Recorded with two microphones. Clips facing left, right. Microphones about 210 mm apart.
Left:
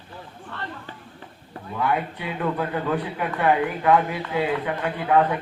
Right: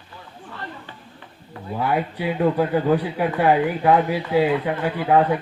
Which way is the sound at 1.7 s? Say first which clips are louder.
Right 2 dB; 35° right (ahead or behind).